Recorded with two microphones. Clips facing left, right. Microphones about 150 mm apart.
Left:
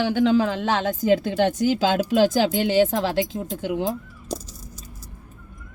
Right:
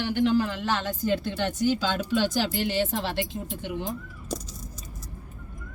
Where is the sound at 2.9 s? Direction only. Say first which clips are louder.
Left 6 dB; 90° left.